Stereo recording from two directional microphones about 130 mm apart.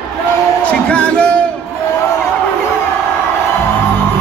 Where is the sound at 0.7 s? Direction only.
10° left (ahead or behind).